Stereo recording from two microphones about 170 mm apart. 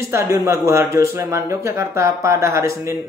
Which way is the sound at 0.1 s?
15° right (ahead or behind).